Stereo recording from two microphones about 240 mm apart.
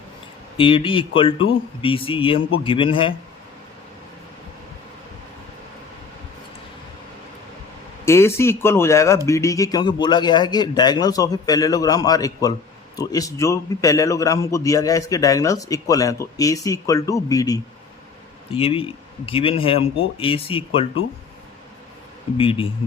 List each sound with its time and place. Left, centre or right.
0.5 s speech: left
8.0 s a man's voice: centre
22.4 s speech: left